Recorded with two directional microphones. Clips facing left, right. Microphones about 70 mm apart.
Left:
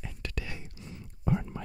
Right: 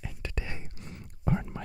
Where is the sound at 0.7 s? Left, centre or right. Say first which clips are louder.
Even; right.